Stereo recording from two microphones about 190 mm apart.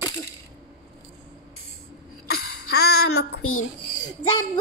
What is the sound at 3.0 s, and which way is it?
Child singing, 90° left.